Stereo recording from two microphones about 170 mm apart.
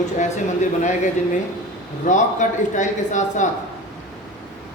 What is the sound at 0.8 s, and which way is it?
Speech, 45° left (ahead or behind).